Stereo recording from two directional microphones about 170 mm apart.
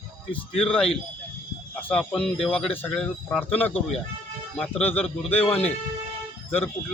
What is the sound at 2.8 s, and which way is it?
Speech, 5° left (ahead or behind).